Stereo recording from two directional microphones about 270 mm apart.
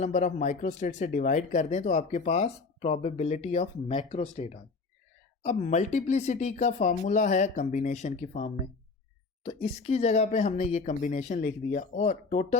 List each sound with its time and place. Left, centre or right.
0.0 s speech: left